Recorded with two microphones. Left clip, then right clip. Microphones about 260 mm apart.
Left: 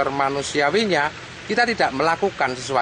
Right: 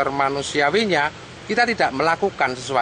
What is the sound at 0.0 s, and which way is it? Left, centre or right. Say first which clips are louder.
Speech: right 1 dB; centre.